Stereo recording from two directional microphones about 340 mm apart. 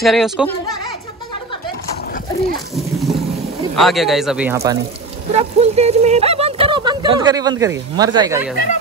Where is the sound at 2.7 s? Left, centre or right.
Centre.